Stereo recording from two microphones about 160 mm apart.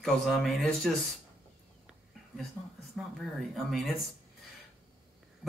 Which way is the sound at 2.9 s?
Centre (ahead or behind).